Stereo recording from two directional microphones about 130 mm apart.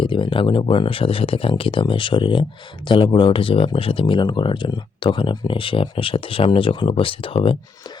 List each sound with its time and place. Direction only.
0.0 s speech: 40° left (ahead or behind)